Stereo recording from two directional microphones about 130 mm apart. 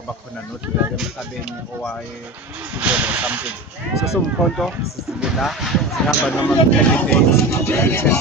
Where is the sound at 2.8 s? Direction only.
10° right (ahead or behind).